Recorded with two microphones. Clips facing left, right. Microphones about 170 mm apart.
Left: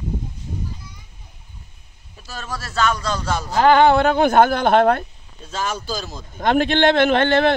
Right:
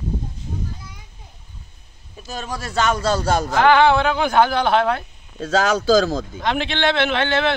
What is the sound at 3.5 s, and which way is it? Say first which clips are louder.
A woman's voice: left 2 dB; 40° left (ahead or behind).